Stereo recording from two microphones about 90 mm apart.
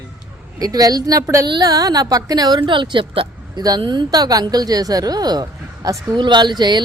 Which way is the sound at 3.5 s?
45° right (ahead or behind).